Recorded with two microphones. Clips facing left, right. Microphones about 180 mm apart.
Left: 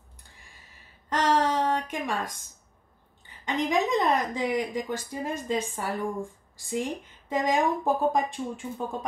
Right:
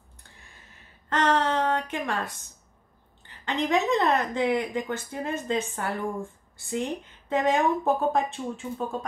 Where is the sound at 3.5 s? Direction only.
10° left (ahead or behind).